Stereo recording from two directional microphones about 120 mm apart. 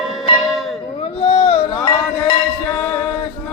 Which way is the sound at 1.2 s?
55° left (ahead or behind).